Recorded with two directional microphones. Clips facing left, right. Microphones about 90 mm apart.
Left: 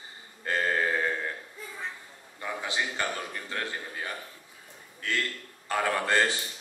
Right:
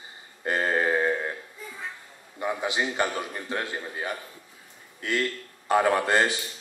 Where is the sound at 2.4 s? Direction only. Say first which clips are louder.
Right 5 dB; 20° right (ahead or behind).